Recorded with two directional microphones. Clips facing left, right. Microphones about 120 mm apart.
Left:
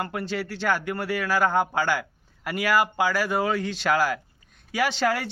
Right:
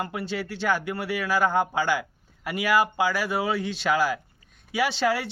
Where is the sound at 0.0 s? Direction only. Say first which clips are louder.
Left 1 dB; 10° right (ahead or behind).